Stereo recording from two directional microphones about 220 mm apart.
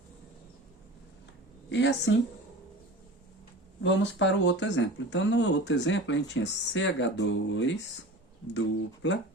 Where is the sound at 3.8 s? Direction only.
55° left (ahead or behind).